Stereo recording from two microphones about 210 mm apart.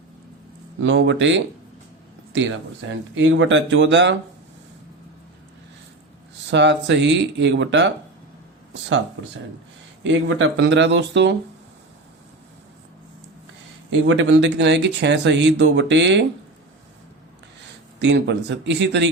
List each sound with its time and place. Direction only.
0.8 s speech: 60° right (ahead or behind)
2.9 s speech: 60° right (ahead or behind)
6.5 s speech: 55° right (ahead or behind)
10.0 s speech: 65° right (ahead or behind)
13.9 s speech: 65° right (ahead or behind)
18.0 s speech: 55° right (ahead or behind)